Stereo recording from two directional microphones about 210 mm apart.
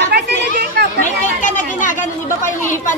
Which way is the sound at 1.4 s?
35° left (ahead or behind).